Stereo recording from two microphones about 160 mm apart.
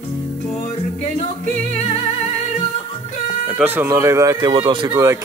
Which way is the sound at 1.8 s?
40° left (ahead or behind).